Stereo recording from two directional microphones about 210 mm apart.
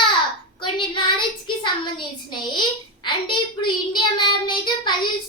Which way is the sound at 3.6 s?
20° left (ahead or behind).